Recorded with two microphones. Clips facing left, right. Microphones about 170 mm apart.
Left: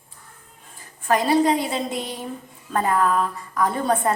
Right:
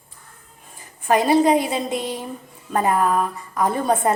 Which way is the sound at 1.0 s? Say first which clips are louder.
Right 2 dB; 20° right (ahead or behind).